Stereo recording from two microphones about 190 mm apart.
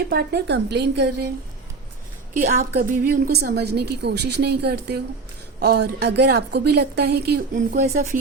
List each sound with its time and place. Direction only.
0.1 s a woman's voice: 60° right (ahead or behind)
2.3 s a woman's voice: 50° right (ahead or behind)